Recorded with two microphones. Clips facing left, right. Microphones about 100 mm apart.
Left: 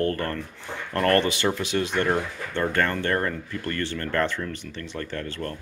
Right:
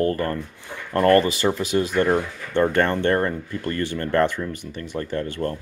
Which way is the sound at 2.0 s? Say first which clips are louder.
Right 4 dB; 20° right (ahead or behind).